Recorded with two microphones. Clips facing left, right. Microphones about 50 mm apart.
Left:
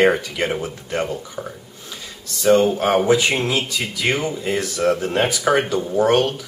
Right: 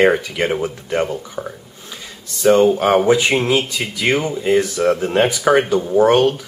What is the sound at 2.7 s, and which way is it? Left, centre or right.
Speech, centre.